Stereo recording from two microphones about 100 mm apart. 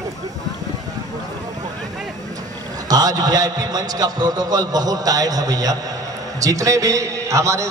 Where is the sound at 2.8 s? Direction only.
40° right (ahead or behind).